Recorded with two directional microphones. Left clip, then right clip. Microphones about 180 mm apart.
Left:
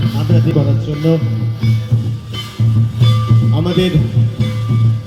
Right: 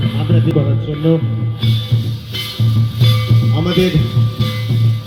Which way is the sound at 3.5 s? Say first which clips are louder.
Right 1 dB; 30° left (ahead or behind).